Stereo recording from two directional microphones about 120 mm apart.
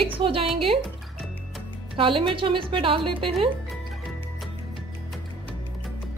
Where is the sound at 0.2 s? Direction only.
50° right (ahead or behind).